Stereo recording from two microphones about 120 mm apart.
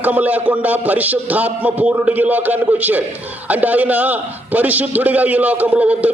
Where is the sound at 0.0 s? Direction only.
15° right (ahead or behind).